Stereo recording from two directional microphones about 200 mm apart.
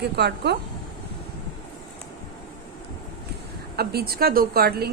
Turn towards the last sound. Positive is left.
turn(degrees=-50)  # may be behind; listen again after turning